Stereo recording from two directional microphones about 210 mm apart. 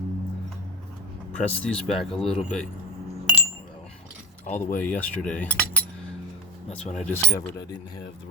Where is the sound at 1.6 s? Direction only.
5° left (ahead or behind).